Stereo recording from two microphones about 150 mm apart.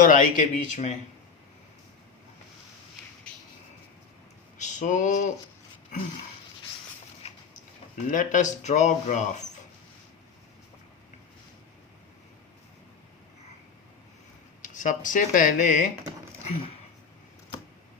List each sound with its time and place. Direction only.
0.0 s speech: 65° left (ahead or behind)
4.5 s speech: 55° left (ahead or behind)
7.2 s vehicle: 45° left (ahead or behind)
8.1 s speech: 55° left (ahead or behind)
14.6 s speech: 60° left (ahead or behind)